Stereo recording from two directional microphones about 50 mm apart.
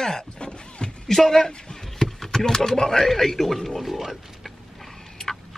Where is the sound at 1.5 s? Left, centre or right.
Centre.